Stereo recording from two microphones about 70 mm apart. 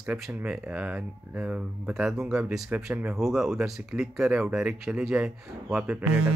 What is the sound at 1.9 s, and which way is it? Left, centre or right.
Speech, centre.